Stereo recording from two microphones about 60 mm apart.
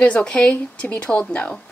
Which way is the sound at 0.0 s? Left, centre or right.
Centre.